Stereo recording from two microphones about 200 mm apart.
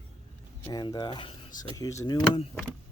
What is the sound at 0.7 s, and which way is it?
Speech, 20° left (ahead or behind).